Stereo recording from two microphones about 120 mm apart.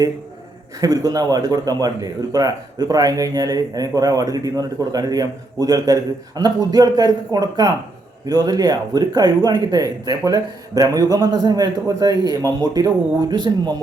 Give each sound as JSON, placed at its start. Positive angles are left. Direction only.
{"t": 0.8, "sound": "a man's voice", "side_deg": -30}